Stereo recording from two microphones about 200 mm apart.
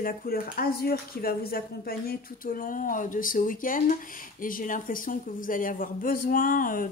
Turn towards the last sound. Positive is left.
turn(degrees=45)  # may be behind; listen again after turning